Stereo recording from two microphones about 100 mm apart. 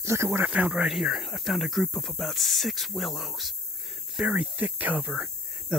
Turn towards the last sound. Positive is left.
turn(degrees=-15)  # may be behind; listen again after turning